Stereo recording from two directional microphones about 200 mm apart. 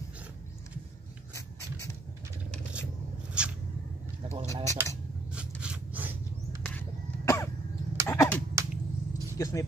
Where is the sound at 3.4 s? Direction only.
5° right (ahead or behind).